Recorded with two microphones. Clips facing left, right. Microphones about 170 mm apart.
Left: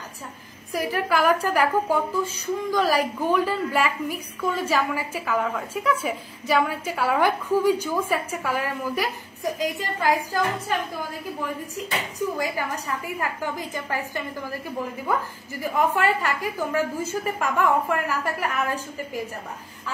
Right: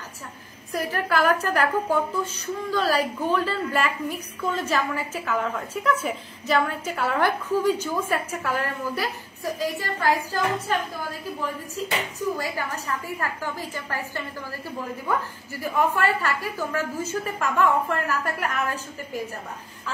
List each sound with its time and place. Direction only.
0.7 s a woman's voice: 10° left (ahead or behind)
12.4 s a woman's voice: 15° left (ahead or behind)
15.6 s a woman's voice: 15° left (ahead or behind)